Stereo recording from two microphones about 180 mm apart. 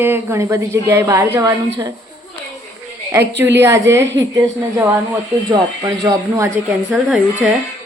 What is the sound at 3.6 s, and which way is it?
A woman's voice, 15° right (ahead or behind).